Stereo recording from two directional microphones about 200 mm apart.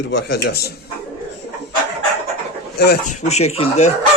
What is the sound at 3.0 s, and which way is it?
Speech, 35° left (ahead or behind).